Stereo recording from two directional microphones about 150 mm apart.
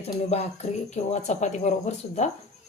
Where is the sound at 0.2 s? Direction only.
45° left (ahead or behind).